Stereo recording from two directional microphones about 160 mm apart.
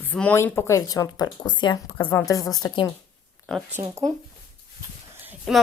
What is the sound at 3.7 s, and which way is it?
Speech, 20° right (ahead or behind).